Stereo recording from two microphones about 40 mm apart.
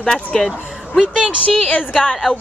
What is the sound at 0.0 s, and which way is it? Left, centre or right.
Speech, centre.